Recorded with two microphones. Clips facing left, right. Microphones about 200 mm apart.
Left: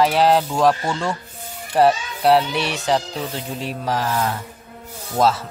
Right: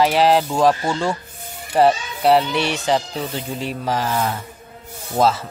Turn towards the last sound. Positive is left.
turn(degrees=0)  # may be behind; listen again after turning